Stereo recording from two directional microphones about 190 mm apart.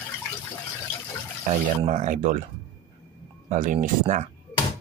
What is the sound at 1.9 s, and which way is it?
Speech, 45° right (ahead or behind).